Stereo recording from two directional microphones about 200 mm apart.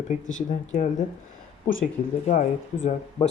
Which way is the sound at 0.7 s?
40° left (ahead or behind).